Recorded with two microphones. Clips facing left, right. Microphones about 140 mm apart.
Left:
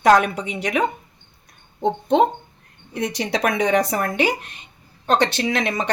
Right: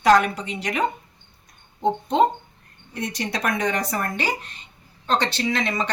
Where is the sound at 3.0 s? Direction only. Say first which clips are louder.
Left 5 dB; 80° left; by 4.3 s 65° left (ahead or behind).